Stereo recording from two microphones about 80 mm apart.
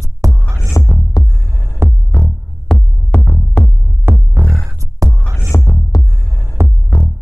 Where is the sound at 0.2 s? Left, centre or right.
Right.